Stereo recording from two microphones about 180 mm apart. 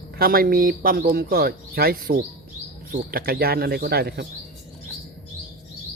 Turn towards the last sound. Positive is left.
turn(degrees=-60)  # may be behind; listen again after turning